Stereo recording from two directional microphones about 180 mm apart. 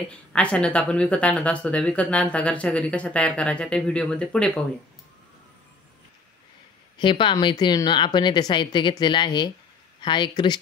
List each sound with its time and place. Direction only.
0.1 s speech: 5° left (ahead or behind)
7.0 s a woman's voice: 25° left (ahead or behind)